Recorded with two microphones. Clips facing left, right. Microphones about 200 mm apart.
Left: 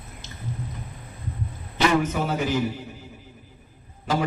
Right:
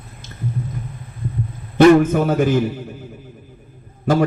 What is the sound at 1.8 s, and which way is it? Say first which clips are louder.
Speech: right 11 dB; 55° right (ahead or behind).